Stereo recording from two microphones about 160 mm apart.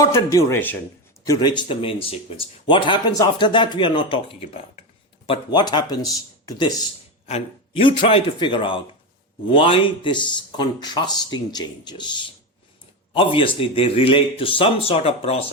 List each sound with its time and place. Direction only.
0.0 s speech: 20° left (ahead or behind)
1.2 s speech: 25° left (ahead or behind)
6.4 s a sound: 20° left (ahead or behind)
7.3 s speech: 35° left (ahead or behind)